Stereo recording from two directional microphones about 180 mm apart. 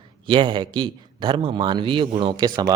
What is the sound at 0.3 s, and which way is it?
A man's voice, 25° right (ahead or behind).